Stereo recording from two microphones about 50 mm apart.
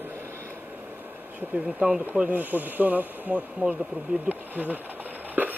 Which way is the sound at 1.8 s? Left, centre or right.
Centre.